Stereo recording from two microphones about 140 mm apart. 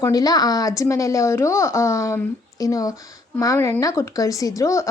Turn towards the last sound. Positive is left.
turn(degrees=20)  # may be behind; listen again after turning